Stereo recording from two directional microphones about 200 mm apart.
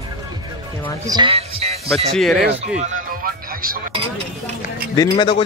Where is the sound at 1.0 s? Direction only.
20° right (ahead or behind).